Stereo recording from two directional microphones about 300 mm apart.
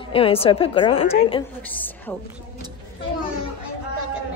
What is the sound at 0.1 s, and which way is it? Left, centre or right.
A woman's voice, centre.